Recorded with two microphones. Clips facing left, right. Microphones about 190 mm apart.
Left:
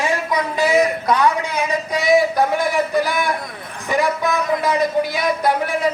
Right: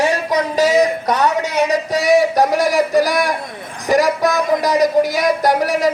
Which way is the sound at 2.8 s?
40° right (ahead or behind).